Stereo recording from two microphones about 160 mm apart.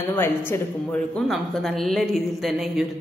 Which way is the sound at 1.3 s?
Centre (ahead or behind).